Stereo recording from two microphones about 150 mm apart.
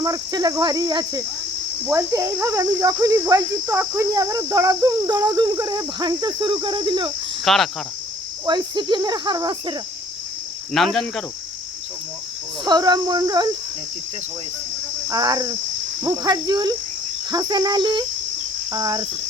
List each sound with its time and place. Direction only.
0.0 s speech: 25° right (ahead or behind)
7.4 s speech: centre (ahead or behind)
8.4 s cricket: 30° right (ahead or behind)
10.7 s speech: centre (ahead or behind)
12.6 s speech: 30° right (ahead or behind)
15.1 s speech: 30° right (ahead or behind)